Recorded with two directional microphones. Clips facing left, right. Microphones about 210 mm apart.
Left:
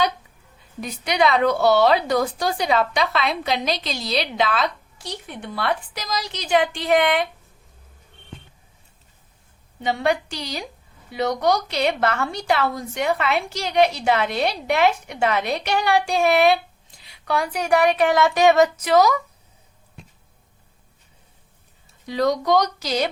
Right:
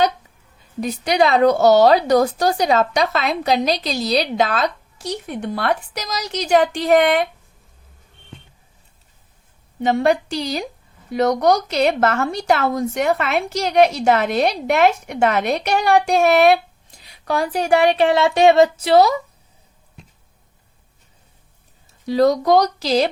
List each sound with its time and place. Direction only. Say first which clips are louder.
0.8 s a woman's voice: right 4 dB; 35° right (ahead or behind)
9.9 s a woman's voice: right 5 dB; 40° right (ahead or behind)
17.2 s speech: right 3 dB; 35° right (ahead or behind)
22.0 s a woman's voice: right 5 dB; 35° right (ahead or behind)